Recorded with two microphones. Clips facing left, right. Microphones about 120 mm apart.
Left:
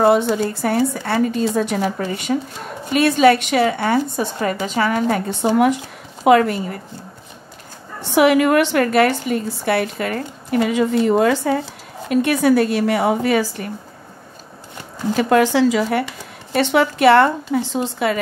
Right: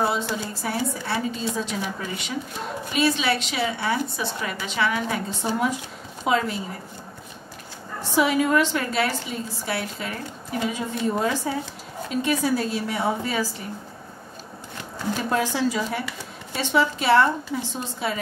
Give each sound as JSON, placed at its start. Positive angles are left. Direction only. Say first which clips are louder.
{"t": 0.0, "sound": "a woman's voice", "louder": "left 10 dB", "side_deg": 60}
{"t": 1.8, "sound": "a woman's voice", "louder": "left 8 dB", "side_deg": 50}
{"t": 6.2, "sound": "a woman's voice", "louder": "left 10 dB", "side_deg": 60}
{"t": 8.1, "sound": "a woman's voice", "louder": "left 7 dB", "side_deg": 70}
{"t": 12.1, "sound": "a woman's voice", "louder": "left 8 dB", "side_deg": 65}
{"t": 15.1, "sound": "a woman's voice", "louder": "left 10 dB", "side_deg": 80}